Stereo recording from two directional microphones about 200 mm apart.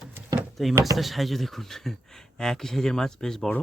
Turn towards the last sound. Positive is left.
turn(degrees=0)  # may be behind; listen again after turning